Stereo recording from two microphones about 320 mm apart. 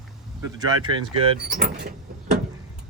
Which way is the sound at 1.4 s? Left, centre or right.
Right.